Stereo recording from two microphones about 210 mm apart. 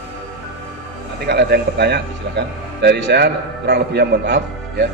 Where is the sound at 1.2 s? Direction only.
50° right (ahead or behind).